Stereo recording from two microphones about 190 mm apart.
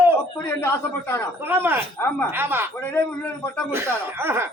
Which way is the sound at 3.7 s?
10° right (ahead or behind).